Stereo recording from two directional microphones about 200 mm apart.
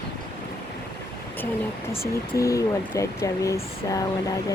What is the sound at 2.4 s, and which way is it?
Speech, 15° left (ahead or behind).